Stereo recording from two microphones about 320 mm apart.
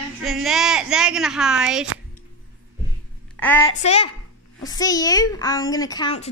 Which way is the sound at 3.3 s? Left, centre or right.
Centre.